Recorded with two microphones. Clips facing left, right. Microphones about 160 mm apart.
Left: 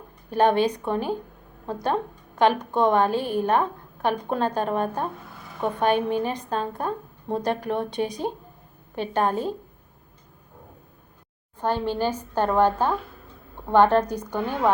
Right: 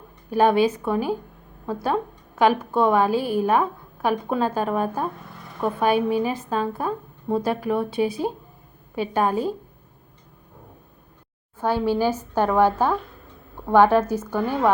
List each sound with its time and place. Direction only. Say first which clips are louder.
0.3 s a woman's voice: right 2 dB; 10° right (ahead or behind)
11.6 s a woman's voice: right 3 dB; 10° right (ahead or behind)